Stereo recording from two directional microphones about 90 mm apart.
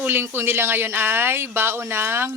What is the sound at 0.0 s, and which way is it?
Speech, 25° right (ahead or behind).